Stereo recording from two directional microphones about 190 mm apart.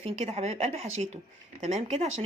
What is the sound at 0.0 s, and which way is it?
Speech, 30° right (ahead or behind).